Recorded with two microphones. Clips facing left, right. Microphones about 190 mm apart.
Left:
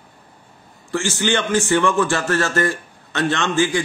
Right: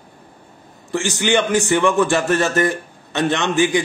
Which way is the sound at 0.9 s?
15° right (ahead or behind).